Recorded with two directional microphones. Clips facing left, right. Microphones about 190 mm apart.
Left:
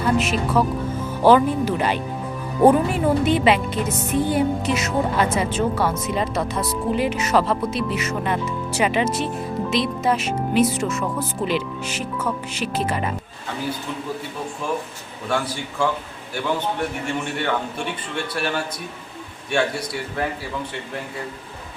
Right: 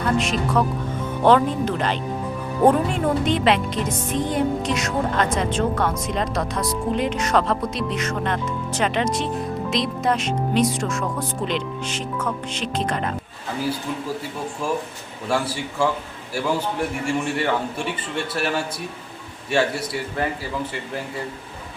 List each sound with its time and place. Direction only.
0.0 s a woman's voice: 5° left (ahead or behind)
15.3 s a man's voice: 5° right (ahead or behind)
17.1 s a woman's voice: 5° right (ahead or behind)